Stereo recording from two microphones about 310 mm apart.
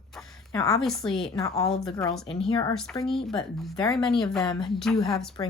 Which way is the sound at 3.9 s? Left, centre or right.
Centre.